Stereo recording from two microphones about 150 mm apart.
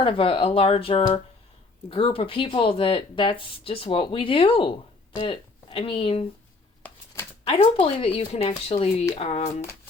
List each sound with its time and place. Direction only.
0.0 s speech: 35° left (ahead or behind)
7.4 s speech: 35° left (ahead or behind)